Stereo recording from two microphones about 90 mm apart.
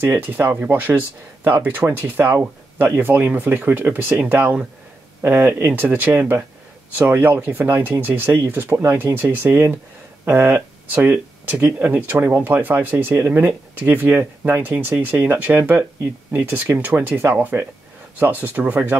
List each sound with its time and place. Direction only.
0.0 s speech: 20° right (ahead or behind)